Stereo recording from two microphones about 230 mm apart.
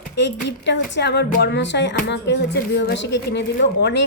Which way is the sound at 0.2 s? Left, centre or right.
Left.